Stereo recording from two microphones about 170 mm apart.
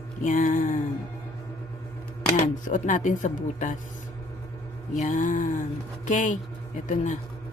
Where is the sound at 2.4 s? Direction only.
50° left (ahead or behind).